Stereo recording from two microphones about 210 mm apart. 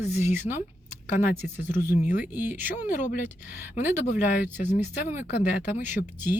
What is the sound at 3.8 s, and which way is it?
Speech, 35° left (ahead or behind).